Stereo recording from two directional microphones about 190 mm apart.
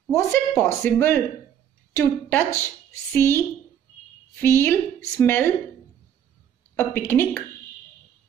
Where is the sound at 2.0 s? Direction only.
10° left (ahead or behind).